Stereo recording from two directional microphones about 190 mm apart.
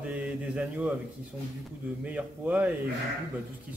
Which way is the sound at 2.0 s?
10° right (ahead or behind).